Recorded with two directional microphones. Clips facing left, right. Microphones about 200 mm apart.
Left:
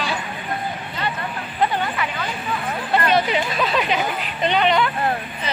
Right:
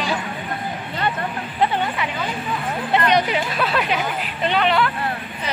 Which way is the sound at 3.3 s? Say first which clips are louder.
Left 1 dB; 10° right (ahead or behind).